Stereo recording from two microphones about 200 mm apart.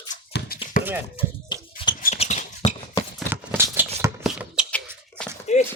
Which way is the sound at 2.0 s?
35° left (ahead or behind).